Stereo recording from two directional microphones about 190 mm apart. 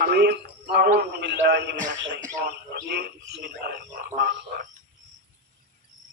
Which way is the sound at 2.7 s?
55° right (ahead or behind).